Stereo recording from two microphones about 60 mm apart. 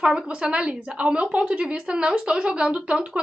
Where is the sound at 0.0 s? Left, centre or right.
Centre.